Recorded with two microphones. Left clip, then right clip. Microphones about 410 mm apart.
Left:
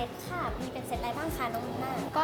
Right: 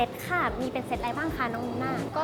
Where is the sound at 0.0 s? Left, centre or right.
Right.